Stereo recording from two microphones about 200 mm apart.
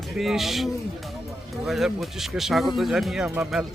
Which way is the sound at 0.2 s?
Centre (ahead or behind).